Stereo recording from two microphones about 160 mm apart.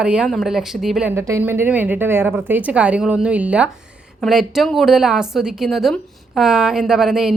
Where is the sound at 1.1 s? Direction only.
15° right (ahead or behind).